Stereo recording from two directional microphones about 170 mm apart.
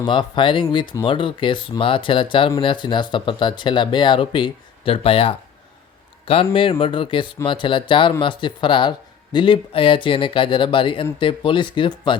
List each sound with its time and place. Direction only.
0.0 s speech: 30° left (ahead or behind)